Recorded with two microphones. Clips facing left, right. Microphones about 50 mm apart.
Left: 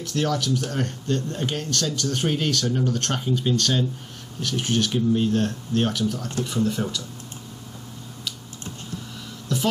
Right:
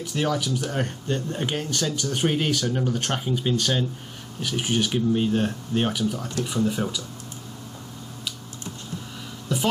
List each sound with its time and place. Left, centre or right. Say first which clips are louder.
0.0 s speech: left 1 dB; centre
9.5 s music: even; centre